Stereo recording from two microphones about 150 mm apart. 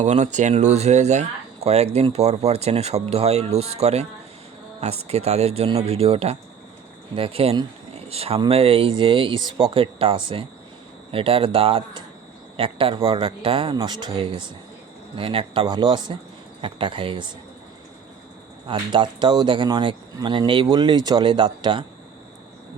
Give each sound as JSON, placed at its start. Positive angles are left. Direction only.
{"t": 0.0, "sound": "speech", "side_deg": -50}
{"t": 18.7, "sound": "speech", "side_deg": -30}